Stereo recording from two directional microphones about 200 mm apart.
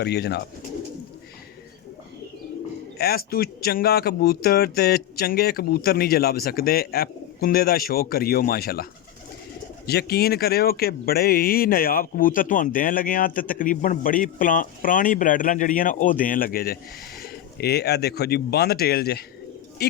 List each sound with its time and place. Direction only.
0.0 s speech: 55° left (ahead or behind)
3.0 s speech: 50° left (ahead or behind)